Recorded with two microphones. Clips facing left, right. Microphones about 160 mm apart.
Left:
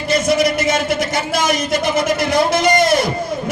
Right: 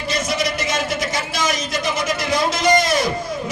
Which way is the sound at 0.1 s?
55° left (ahead or behind).